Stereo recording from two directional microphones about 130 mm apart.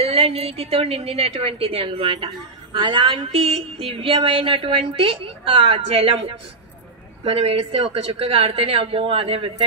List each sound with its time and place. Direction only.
0.0 s a woman's voice: 50° right (ahead or behind)